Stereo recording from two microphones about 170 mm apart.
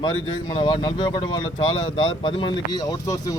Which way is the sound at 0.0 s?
25° left (ahead or behind).